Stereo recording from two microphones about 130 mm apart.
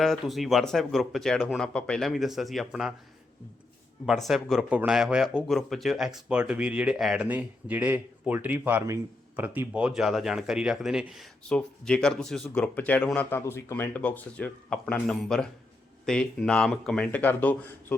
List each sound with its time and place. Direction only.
0.0 s speech: centre (ahead or behind)
4.0 s speech: centre (ahead or behind)